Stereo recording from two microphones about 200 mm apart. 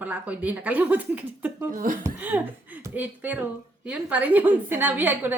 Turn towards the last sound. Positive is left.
turn(degrees=-10)  # may be behind; listen again after turning